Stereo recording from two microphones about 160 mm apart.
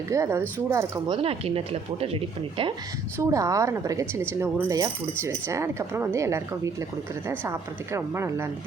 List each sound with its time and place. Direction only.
0.1 s speech: 15° right (ahead or behind)
1.1 s speech: 35° right (ahead or behind)
3.2 s speech: 20° right (ahead or behind)